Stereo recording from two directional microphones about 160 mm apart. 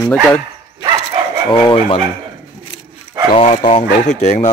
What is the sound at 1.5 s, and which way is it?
Chicken, 30° left (ahead or behind).